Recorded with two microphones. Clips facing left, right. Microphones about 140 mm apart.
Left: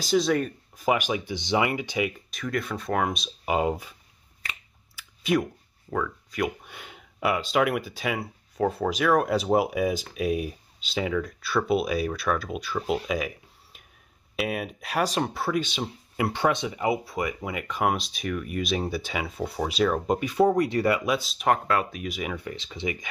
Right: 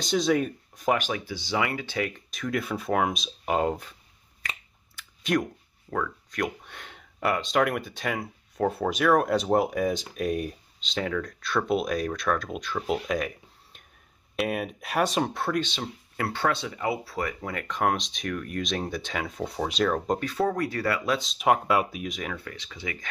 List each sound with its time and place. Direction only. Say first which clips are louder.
0.0 s speech: left 1 dB; centre (ahead or behind)
4.9 s speech: left 2 dB; 5° left (ahead or behind)
14.3 s speech: right 1 dB; centre (ahead or behind)
21.5 s speech: right 1 dB; 10° right (ahead or behind)
22.0 s speech: left 2 dB; 5° left (ahead or behind); by 22.9 s 25° left (ahead or behind)